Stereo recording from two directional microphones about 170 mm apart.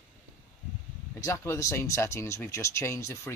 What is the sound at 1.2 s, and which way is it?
Speech, 15° left (ahead or behind).